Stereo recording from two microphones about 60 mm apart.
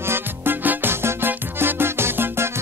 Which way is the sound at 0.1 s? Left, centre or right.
Right.